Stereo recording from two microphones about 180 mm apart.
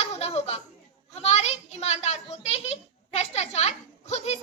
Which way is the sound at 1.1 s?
35° left (ahead or behind).